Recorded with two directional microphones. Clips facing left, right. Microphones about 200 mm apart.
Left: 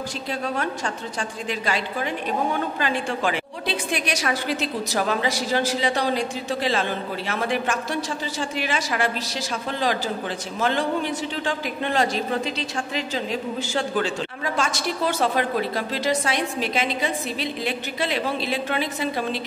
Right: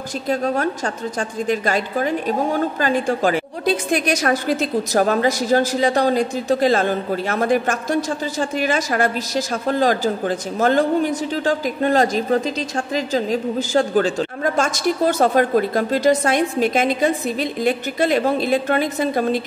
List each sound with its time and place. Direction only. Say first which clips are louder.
0.3 s a woman's voice: right 8 dB; 45° right (ahead or behind)